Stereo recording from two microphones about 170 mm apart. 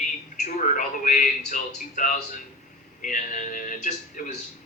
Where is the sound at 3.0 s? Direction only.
50° left (ahead or behind).